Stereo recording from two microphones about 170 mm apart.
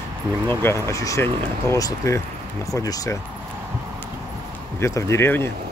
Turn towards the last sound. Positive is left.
turn(degrees=15)  # may be behind; listen again after turning